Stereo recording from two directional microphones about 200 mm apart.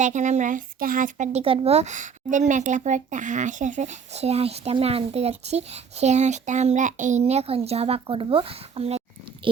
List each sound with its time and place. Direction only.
0.0 s speech: 35° right (ahead or behind)